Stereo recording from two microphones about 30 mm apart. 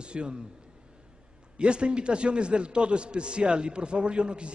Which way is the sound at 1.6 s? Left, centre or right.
Right.